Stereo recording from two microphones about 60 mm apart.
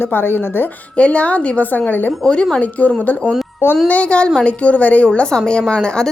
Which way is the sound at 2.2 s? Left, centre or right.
Centre.